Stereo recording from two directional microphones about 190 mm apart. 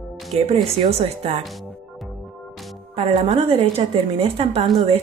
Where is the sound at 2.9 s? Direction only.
30° right (ahead or behind).